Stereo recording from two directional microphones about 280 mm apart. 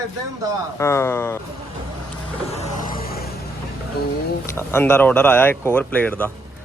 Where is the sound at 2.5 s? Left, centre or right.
Left.